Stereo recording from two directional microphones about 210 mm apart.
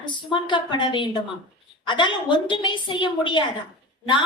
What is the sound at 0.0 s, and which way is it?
A woman's voice, 25° left (ahead or behind).